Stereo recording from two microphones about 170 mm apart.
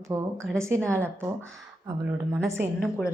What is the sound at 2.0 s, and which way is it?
Speech, 15° right (ahead or behind).